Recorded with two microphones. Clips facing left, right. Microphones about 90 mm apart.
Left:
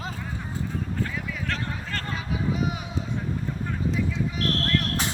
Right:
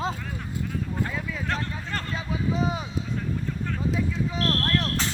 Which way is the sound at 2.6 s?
30° right (ahead or behind).